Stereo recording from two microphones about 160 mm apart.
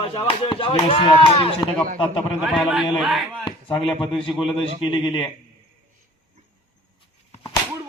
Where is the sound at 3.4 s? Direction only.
35° left (ahead or behind).